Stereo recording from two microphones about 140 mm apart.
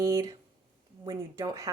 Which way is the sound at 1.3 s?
25° right (ahead or behind).